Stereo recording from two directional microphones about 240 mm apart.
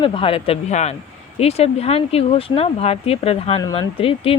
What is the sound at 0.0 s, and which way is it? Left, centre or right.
Speech, left.